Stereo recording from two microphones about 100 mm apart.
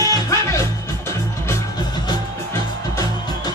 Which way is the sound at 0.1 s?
30° left (ahead or behind).